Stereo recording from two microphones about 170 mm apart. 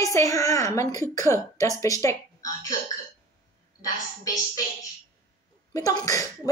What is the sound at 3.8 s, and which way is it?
A woman's voice, 20° left (ahead or behind).